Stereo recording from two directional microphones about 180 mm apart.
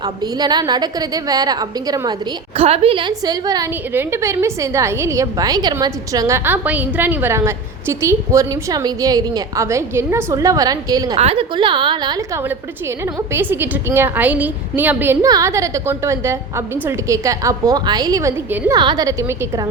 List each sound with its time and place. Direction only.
0.0 s a woman's voice: 20° right (ahead or behind)
2.6 s a woman's voice: 35° right (ahead or behind)
11.2 s a woman's voice: 30° right (ahead or behind)
13.3 s a woman's voice: 10° right (ahead or behind)